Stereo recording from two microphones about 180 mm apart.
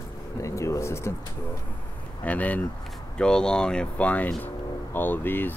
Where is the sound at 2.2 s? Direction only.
10° left (ahead or behind).